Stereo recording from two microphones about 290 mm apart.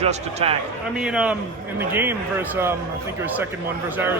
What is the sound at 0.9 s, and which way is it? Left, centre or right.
A man's voice, centre.